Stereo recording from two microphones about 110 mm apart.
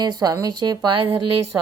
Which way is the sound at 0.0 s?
35° right (ahead or behind).